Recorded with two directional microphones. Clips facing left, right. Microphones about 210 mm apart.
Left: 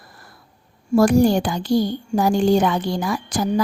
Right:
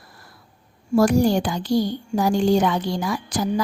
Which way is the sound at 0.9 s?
55° left (ahead or behind).